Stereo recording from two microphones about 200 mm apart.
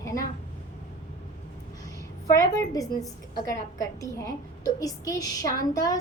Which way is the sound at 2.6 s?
15° left (ahead or behind).